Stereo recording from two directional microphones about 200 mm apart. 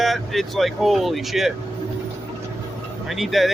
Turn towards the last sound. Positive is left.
turn(degrees=0)  # may be behind; listen again after turning